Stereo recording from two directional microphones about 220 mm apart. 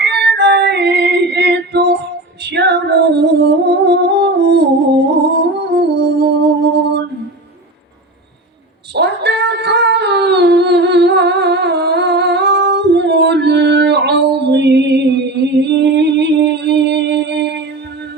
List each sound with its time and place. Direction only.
0.0 s female singing: 50° right (ahead or behind)
2.4 s music: 50° right (ahead or behind)
5.0 s humming: 50° right (ahead or behind)
9.0 s dog: 50° right (ahead or behind)